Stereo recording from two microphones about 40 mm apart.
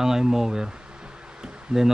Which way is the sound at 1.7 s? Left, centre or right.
Centre.